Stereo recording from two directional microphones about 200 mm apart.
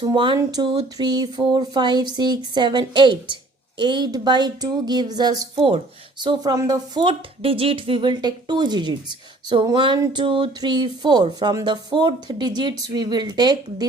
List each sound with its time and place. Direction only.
0.0 s speech: 25° right (ahead or behind)